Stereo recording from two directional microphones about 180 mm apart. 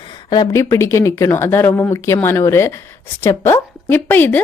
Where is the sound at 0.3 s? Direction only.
20° left (ahead or behind).